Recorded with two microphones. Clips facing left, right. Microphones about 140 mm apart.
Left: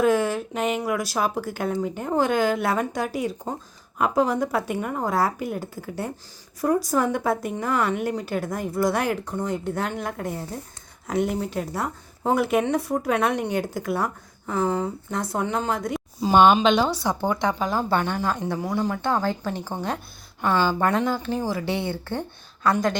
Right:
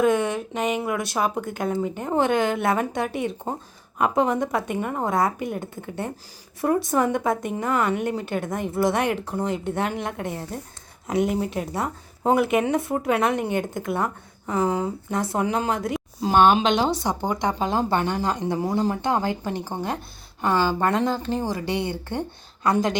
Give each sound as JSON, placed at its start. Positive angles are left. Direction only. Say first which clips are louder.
{"t": 0.0, "sound": "a woman's voice", "louder": "even", "side_deg": 5}
{"t": 6.8, "sound": "a woman's voice", "louder": "right 1 dB", "side_deg": 0}
{"t": 16.7, "sound": "speech", "louder": "even", "side_deg": -20}